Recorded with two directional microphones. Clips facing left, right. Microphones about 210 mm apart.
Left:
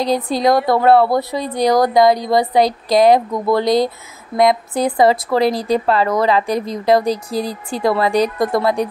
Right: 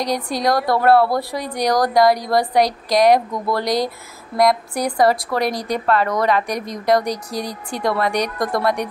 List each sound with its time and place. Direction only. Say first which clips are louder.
0.0 s speech: left 4 dB; 25° left (ahead or behind)